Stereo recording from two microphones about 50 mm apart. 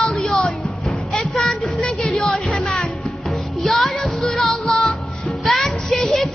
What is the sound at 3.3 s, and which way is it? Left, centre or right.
Music, centre.